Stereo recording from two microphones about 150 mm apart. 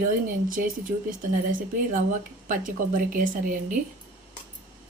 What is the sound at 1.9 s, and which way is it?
A woman's voice, 60° right (ahead or behind).